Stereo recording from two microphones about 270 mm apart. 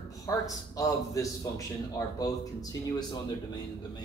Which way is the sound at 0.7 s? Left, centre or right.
Centre.